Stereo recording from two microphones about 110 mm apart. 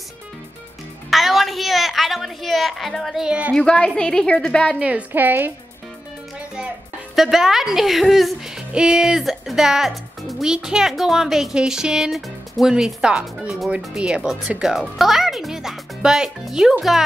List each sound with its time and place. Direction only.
1.1 s a sound: centre (ahead or behind)
3.5 s a woman's voice: 10° left (ahead or behind)
4.7 s a woman's voice: 10° right (ahead or behind)
7.2 s speech: 5° right (ahead or behind)